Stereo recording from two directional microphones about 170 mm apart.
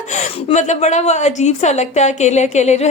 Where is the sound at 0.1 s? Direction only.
45° left (ahead or behind).